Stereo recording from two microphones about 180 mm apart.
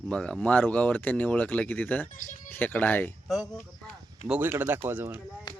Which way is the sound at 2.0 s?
45° left (ahead or behind).